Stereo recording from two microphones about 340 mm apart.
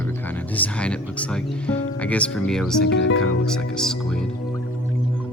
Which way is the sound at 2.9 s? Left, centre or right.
Left.